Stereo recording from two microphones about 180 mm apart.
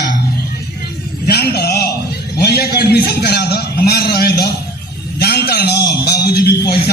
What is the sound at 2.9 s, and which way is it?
A man's voice, 65° left (ahead or behind).